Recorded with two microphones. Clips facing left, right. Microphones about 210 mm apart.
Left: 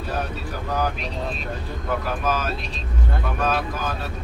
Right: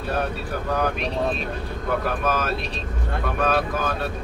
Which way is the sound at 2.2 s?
60° right (ahead or behind).